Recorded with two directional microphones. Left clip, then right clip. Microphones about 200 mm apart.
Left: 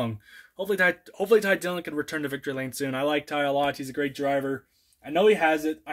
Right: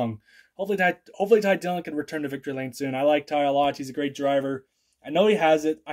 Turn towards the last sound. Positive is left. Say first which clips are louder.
# right 3 dB
turn(degrees=-15)  # may be behind; listen again after turning